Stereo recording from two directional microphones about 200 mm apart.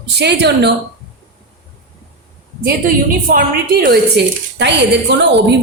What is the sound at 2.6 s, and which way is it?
A woman's voice, 45° right (ahead or behind).